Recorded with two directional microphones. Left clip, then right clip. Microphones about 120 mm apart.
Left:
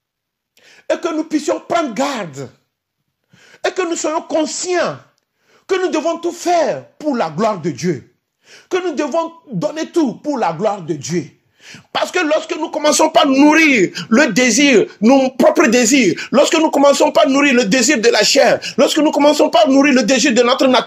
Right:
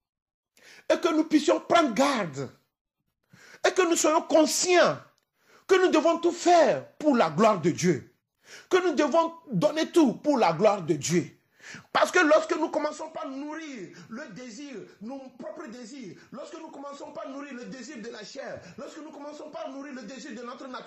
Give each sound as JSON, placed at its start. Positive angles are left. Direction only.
{"t": 0.6, "sound": "speech", "side_deg": 20}
{"t": 5.7, "sound": "speech", "side_deg": 15}
{"t": 11.6, "sound": "speech", "side_deg": 20}